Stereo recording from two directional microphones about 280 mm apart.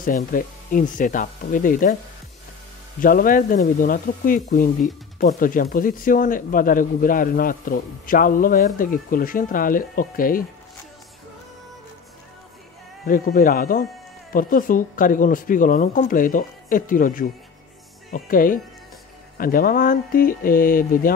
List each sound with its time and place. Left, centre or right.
0.0 s speech: left
3.0 s speech: left
13.0 s speech: left